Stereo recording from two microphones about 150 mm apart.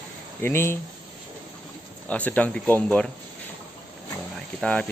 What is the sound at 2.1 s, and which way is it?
Speech, 10° left (ahead or behind).